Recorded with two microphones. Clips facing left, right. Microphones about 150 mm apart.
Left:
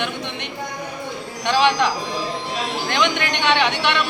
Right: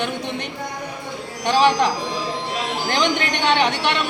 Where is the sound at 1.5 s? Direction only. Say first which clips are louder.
Right 1 dB; 40° right (ahead or behind).